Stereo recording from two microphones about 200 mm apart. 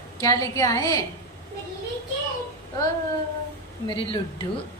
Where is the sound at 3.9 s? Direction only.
25° left (ahead or behind).